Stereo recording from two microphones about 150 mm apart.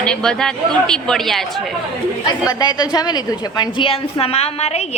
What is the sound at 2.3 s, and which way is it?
A woman's voice, 30° left (ahead or behind).